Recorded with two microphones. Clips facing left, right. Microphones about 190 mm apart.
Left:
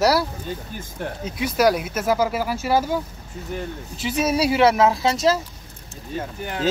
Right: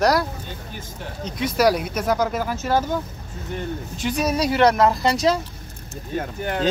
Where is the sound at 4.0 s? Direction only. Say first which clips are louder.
Left 1 dB; 5° left (ahead or behind).